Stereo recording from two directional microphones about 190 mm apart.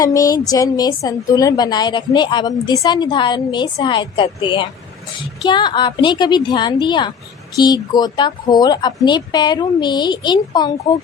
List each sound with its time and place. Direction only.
0.0 s a woman's voice: 20° left (ahead or behind)
5.4 s a woman's voice: 25° left (ahead or behind)